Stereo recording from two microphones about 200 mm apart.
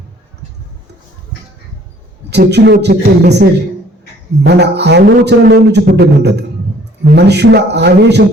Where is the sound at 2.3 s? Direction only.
55° right (ahead or behind).